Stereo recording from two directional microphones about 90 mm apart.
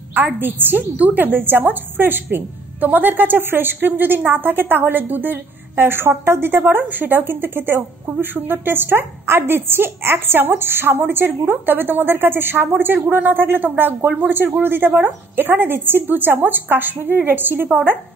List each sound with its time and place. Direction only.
0.4 s a woman's voice: 20° right (ahead or behind)